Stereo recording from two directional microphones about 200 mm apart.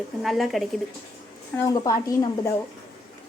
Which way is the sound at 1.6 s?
15° left (ahead or behind).